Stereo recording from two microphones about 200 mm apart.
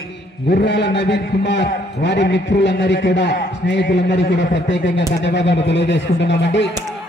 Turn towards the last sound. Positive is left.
turn(degrees=60)  # may be behind; listen again after turning